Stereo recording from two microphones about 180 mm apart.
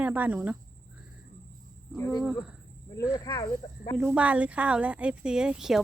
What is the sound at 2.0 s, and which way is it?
Speech, 15° left (ahead or behind).